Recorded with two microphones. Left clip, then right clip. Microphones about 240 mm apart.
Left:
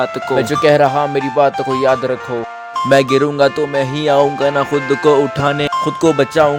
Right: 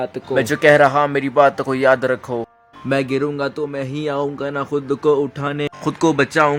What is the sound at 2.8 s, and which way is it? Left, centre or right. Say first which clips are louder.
Speech: left 8 dB; left.